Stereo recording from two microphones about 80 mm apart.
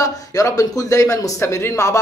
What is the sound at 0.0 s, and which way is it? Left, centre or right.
Speech, left.